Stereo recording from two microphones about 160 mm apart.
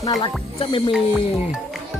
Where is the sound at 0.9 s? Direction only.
Centre (ahead or behind).